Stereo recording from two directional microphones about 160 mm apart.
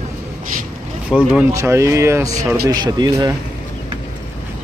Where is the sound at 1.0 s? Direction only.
5° right (ahead or behind); by 3.4 s 25° right (ahead or behind).